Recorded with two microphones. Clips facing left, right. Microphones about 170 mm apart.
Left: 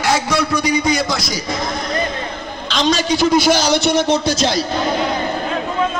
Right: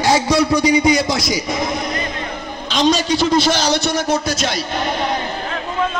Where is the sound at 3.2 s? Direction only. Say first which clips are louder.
Left 2 dB; 10° left (ahead or behind).